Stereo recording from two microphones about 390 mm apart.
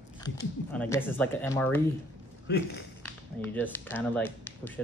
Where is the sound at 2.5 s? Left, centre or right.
Left.